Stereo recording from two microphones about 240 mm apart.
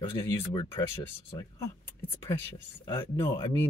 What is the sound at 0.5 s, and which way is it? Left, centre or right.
Speech, centre.